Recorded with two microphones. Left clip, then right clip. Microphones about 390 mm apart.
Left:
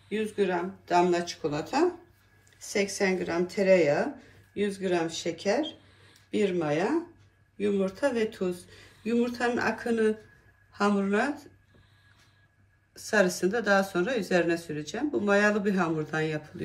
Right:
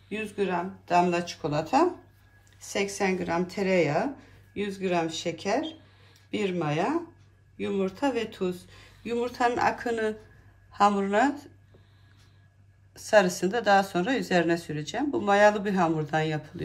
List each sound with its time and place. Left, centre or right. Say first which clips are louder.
0.1 s speech: left 1 dB; right
12.9 s speech: right 4 dB; right